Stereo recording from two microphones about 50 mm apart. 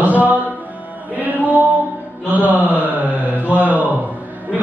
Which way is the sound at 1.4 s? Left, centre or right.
Right.